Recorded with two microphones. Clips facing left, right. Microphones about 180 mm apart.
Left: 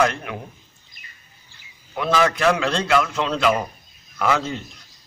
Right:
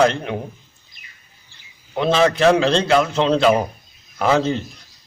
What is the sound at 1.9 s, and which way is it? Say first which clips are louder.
A man's voice: right 4 dB; 25° right (ahead or behind).